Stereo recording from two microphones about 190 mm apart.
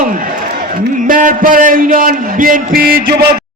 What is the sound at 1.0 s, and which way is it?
A man's voice, 45° right (ahead or behind).